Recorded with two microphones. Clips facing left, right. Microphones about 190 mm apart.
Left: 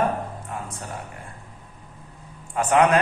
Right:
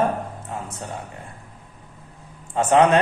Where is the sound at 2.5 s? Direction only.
25° right (ahead or behind).